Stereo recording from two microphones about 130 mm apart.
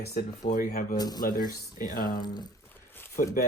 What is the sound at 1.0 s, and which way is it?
Speech, 30° left (ahead or behind).